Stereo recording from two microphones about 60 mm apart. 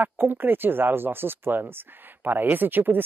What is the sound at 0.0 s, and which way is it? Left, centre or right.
Speech, right.